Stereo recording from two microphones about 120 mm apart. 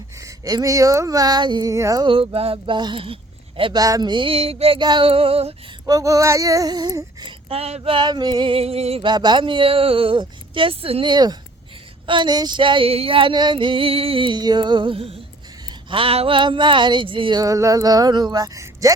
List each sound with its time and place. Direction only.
0.2 s speech: 30° right (ahead or behind)
2.0 s female singing: 50° right (ahead or behind)
3.6 s speech: 35° right (ahead or behind)
4.1 s female singing: 50° right (ahead or behind)
4.8 s female singing: 40° right (ahead or behind)
5.8 s speech: 30° right (ahead or behind)
7.5 s female singing: 55° right (ahead or behind)
9.0 s female singing: 40° right (ahead or behind)
11.1 s speech: 35° right (ahead or behind)
12.0 s female singing: 40° right (ahead or behind)
17.4 s speech: 30° right (ahead or behind)